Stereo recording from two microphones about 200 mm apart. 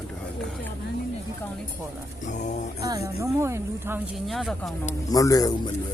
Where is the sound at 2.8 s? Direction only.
15° right (ahead or behind).